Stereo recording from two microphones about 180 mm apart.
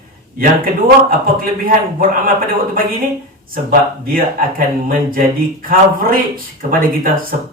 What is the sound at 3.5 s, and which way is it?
A man's voice, 50° right (ahead or behind).